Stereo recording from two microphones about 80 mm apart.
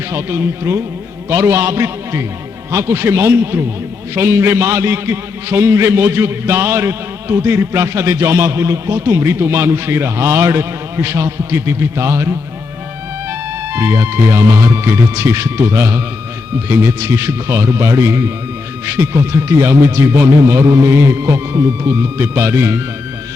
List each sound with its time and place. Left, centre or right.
0.1 s a man's voice: right
13.7 s a man's voice: right